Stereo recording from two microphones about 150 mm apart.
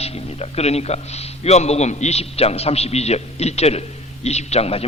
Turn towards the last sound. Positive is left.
turn(degrees=40)  # may be behind; listen again after turning